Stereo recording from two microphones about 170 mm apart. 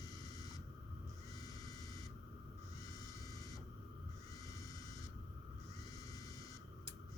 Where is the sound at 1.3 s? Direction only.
20° left (ahead or behind).